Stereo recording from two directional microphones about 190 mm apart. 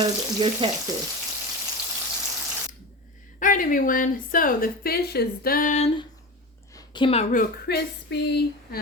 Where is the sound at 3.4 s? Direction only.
45° left (ahead or behind).